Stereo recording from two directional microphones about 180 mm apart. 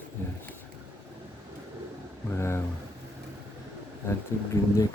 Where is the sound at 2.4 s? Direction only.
15° left (ahead or behind).